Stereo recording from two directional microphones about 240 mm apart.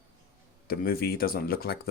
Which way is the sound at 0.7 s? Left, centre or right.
Left.